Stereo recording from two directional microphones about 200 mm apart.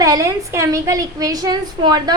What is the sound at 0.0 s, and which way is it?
A woman's voice, 15° right (ahead or behind).